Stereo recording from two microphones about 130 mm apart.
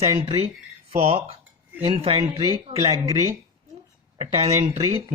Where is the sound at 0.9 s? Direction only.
50° right (ahead or behind).